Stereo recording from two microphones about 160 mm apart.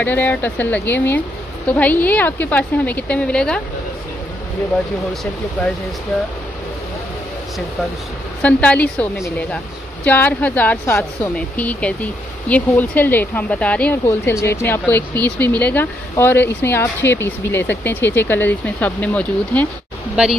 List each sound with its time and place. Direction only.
0.0 s speech: 10° left (ahead or behind)
8.4 s speech: 10° left (ahead or behind)